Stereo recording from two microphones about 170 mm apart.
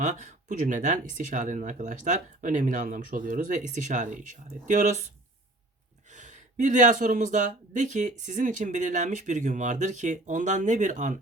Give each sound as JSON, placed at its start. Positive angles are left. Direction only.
{"t": 0.0, "sound": "speech", "side_deg": -45}
{"t": 6.1, "sound": "speech", "side_deg": -45}